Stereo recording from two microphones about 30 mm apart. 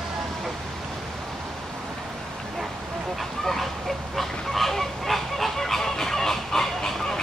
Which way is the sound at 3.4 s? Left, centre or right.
Centre.